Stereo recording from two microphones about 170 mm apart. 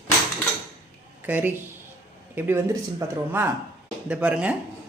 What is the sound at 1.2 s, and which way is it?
Speech, 10° right (ahead or behind).